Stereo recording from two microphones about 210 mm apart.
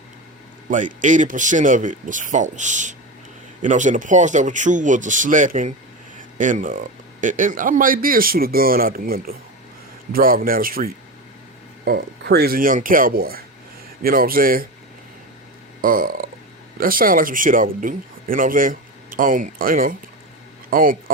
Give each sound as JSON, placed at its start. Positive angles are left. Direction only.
{"t": 0.7, "sound": "speech", "side_deg": -35}
{"t": 15.8, "sound": "a sound", "side_deg": -40}
{"t": 16.7, "sound": "speech", "side_deg": -45}